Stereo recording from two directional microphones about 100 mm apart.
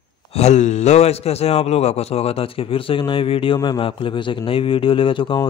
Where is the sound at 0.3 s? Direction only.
90° left.